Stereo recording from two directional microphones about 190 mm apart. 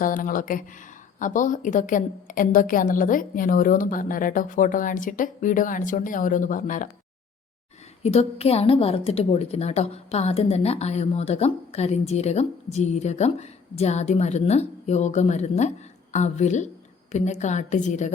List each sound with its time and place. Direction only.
0.0 s a woman's voice: 45° left (ahead or behind)
8.0 s a woman's voice: 35° left (ahead or behind)